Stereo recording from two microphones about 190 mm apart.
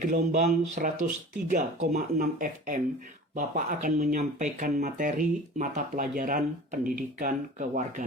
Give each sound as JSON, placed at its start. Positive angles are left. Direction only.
{"t": 0.0, "sound": "speech", "side_deg": -40}